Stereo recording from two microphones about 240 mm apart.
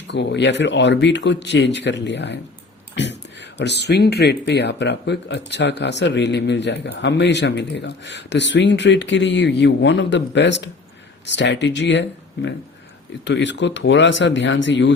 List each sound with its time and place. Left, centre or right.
0.1 s speech: left